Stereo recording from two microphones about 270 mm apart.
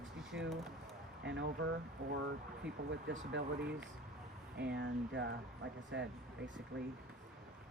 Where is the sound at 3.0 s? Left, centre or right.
Right.